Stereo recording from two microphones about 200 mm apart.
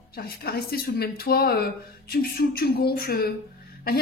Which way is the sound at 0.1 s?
50° left (ahead or behind).